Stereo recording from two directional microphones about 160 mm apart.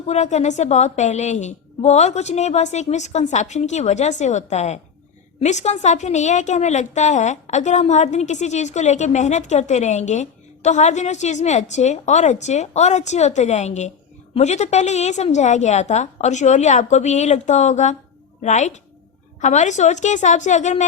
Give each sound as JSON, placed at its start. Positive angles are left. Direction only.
{"t": 0.1, "sound": "a woman's voice", "side_deg": 45}